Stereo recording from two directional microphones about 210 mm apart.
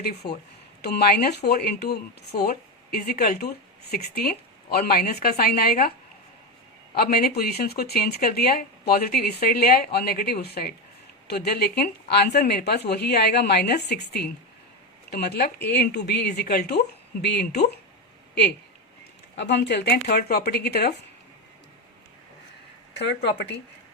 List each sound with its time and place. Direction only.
0.0 s speech: 50° left (ahead or behind)
6.9 s speech: 45° left (ahead or behind)
19.4 s speech: 55° left (ahead or behind)
23.0 s speech: 55° left (ahead or behind)